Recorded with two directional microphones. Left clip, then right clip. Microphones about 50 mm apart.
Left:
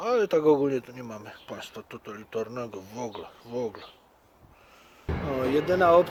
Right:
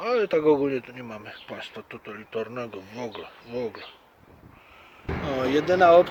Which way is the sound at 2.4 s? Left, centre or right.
Centre.